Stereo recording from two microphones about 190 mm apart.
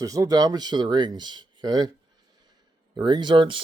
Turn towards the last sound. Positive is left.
turn(degrees=-25)  # may be behind; listen again after turning